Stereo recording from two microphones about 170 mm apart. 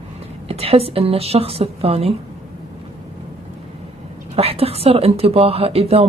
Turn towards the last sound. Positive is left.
turn(degrees=-35)  # may be behind; listen again after turning